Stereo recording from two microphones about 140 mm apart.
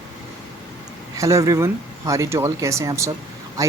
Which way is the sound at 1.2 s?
20° right (ahead or behind).